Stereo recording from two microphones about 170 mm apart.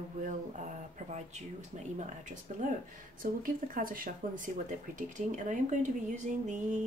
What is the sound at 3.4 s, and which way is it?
Speech, 55° right (ahead or behind).